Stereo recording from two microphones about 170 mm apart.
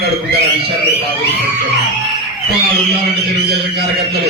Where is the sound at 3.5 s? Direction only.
75° right (ahead or behind).